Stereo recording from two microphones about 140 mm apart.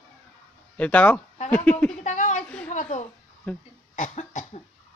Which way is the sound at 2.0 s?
60° left (ahead or behind).